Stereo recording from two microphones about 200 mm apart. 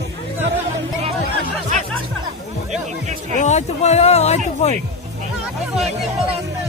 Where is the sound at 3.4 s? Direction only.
35° left (ahead or behind).